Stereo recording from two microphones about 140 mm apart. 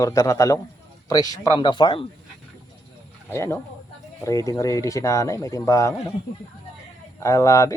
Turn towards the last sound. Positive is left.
turn(degrees=20)  # may be behind; listen again after turning